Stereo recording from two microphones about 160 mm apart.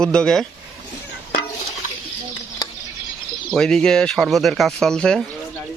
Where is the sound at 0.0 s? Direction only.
5° left (ahead or behind).